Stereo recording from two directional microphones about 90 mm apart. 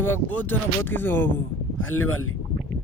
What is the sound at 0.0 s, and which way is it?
Speech, 20° left (ahead or behind).